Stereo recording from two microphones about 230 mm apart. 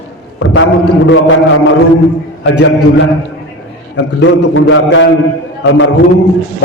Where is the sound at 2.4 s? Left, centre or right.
Left.